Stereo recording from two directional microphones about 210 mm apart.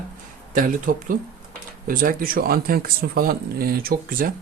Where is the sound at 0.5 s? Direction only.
40° right (ahead or behind).